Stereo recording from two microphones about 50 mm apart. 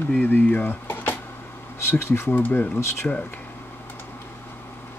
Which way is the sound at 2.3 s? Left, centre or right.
Left.